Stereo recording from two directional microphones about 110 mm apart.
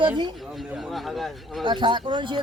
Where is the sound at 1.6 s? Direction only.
45° right (ahead or behind).